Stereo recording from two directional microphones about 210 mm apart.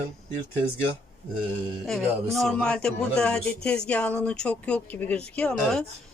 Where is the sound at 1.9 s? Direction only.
Centre (ahead or behind).